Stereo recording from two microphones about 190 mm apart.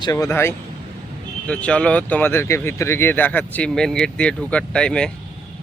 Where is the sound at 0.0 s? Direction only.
15° left (ahead or behind).